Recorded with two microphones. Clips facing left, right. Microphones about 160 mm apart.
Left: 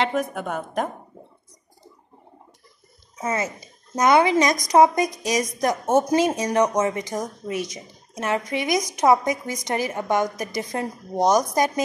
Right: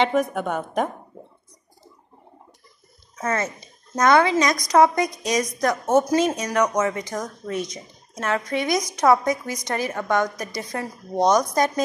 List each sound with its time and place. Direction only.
0.0 s a woman's voice: centre (ahead or behind)
3.2 s a woman's voice: 10° left (ahead or behind)